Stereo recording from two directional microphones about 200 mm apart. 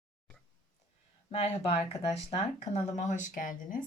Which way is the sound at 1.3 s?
30° left (ahead or behind).